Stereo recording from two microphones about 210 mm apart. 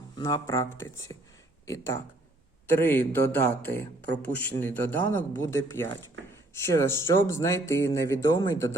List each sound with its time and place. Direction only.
0.2 s speech: 15° left (ahead or behind)